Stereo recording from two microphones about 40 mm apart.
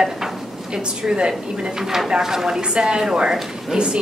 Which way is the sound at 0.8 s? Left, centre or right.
Right.